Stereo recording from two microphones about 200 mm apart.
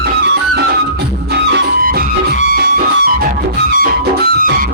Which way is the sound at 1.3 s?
50° right (ahead or behind).